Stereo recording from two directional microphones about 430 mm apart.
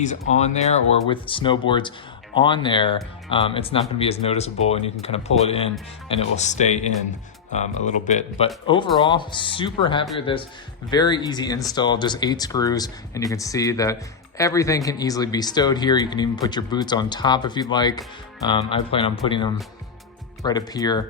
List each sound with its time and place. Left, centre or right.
0.0 s speech: centre